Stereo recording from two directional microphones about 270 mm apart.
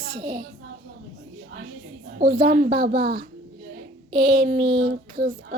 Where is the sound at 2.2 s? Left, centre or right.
Right.